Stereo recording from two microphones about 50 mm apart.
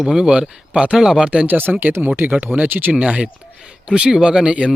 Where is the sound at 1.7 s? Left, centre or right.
Right.